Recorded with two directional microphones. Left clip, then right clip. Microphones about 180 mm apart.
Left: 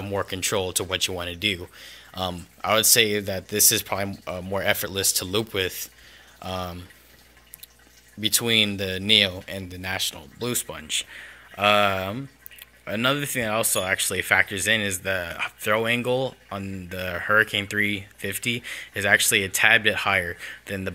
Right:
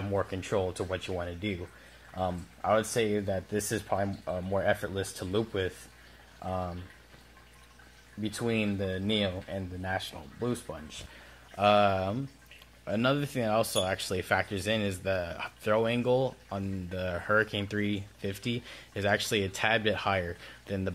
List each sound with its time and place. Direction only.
0.1 s speech: 40° left (ahead or behind)
1.1 s speech: 55° left (ahead or behind)
3.0 s speech: 55° left (ahead or behind)
4.7 s speech: 60° left (ahead or behind)
5.0 s speech: 40° left (ahead or behind)
5.3 s speech: 55° left (ahead or behind)
8.3 s speech: 45° left (ahead or behind)
11.5 s speech: 10° left (ahead or behind)